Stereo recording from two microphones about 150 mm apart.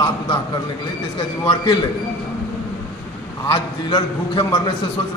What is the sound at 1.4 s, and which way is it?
Speech, 30° left (ahead or behind).